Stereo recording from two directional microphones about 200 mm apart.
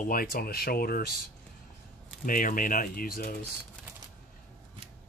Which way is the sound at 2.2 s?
45° left (ahead or behind).